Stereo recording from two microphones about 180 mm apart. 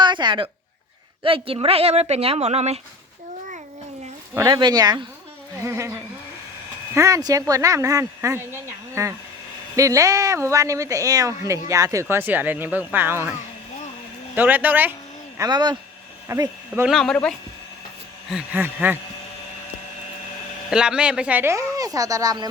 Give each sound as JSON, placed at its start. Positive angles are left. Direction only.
{"t": 0.0, "sound": "a woman's voice", "side_deg": -25}
{"t": 4.4, "sound": "speech", "side_deg": -20}
{"t": 6.9, "sound": "speech", "side_deg": -15}
{"t": 14.3, "sound": "speech", "side_deg": -10}
{"t": 15.4, "sound": "speech", "side_deg": -25}
{"t": 16.9, "sound": "speech", "side_deg": 0}
{"t": 18.3, "sound": "speech", "side_deg": -5}
{"t": 20.7, "sound": "speech", "side_deg": -5}